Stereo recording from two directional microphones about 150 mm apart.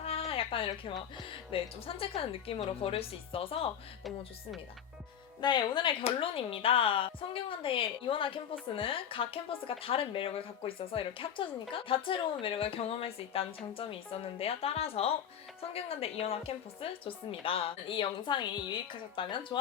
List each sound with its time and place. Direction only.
0.0 s a sound: 40° left (ahead or behind)
1.5 s a woman's voice: 40° left (ahead or behind)
5.4 s a woman's voice: 30° left (ahead or behind)